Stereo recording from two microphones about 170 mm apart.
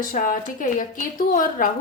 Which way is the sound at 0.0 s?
50° left (ahead or behind).